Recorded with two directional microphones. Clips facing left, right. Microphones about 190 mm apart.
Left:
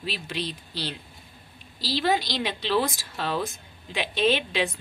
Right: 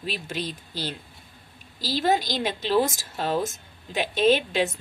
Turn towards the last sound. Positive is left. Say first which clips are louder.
# right 4 dB
turn(degrees=-45)  # may be behind; listen again after turning